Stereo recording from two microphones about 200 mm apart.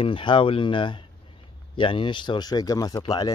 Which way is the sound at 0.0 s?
25° left (ahead or behind).